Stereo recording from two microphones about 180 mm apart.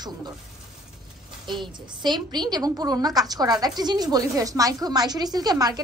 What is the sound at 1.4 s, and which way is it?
A woman's voice, 25° right (ahead or behind).